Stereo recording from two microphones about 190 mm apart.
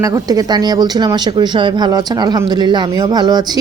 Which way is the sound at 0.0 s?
20° right (ahead or behind).